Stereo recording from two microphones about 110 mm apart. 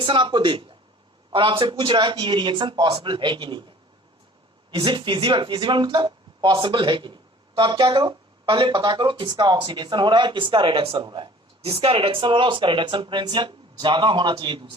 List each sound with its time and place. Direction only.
0.0 s speech: 45° right (ahead or behind)
11.6 s speech: 60° right (ahead or behind)